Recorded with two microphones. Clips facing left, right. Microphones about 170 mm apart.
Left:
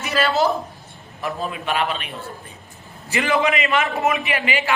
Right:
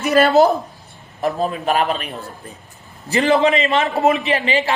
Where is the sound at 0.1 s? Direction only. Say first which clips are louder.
Right 7 dB; 45° right (ahead or behind).